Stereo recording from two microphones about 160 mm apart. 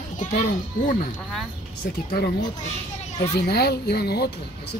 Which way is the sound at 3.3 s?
90° left.